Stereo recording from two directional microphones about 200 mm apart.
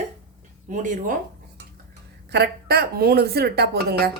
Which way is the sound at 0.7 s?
40° right (ahead or behind).